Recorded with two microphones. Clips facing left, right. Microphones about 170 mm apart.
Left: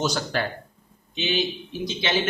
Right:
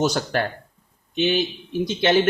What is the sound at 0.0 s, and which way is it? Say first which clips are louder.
A man's voice: right 4 dB; 55° right (ahead or behind).